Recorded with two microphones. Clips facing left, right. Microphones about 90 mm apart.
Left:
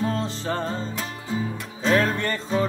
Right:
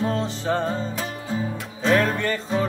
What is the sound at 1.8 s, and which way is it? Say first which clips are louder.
Music: right 1 dB; centre (ahead or behind).